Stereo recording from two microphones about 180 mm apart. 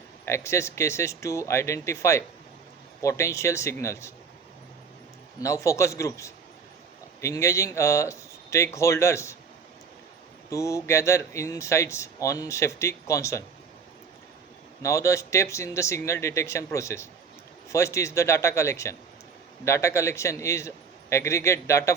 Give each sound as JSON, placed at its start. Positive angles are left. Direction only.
{"t": 0.3, "sound": "speech", "side_deg": 15}
{"t": 5.4, "sound": "speech", "side_deg": 15}
{"t": 10.5, "sound": "speech", "side_deg": 15}
{"t": 14.8, "sound": "speech", "side_deg": 15}